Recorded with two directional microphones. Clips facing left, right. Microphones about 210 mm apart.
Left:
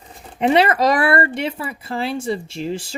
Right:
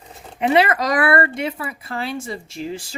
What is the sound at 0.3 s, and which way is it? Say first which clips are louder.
Speech: left 2 dB; 30° left (ahead or behind).